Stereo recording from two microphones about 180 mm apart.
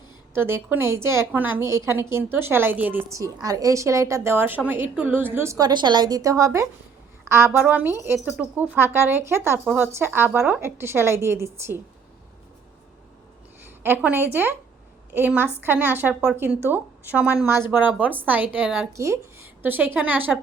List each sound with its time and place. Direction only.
0.3 s a woman's voice: 15° right (ahead or behind)
13.8 s a woman's voice: 10° right (ahead or behind)